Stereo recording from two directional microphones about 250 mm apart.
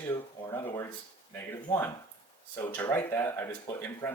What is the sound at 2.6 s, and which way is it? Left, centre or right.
Speech, centre.